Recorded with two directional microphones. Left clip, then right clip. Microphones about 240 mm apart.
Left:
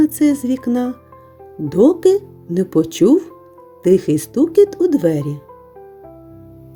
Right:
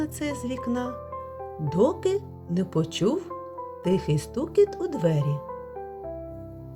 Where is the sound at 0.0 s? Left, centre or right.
Left.